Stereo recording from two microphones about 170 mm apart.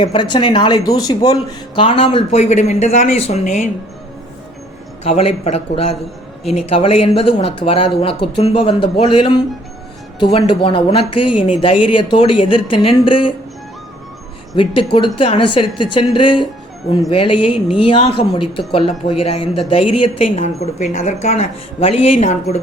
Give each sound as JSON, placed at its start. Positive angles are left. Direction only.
{"t": 0.0, "sound": "speech", "side_deg": 30}
{"t": 5.0, "sound": "speech", "side_deg": 35}
{"t": 10.3, "sound": "speech", "side_deg": 30}
{"t": 14.5, "sound": "speech", "side_deg": 30}